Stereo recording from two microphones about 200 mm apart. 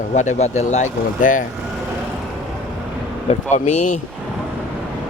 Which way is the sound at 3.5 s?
35° left (ahead or behind).